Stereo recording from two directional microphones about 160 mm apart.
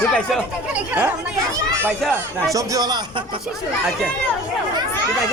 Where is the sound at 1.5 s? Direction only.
15° right (ahead or behind).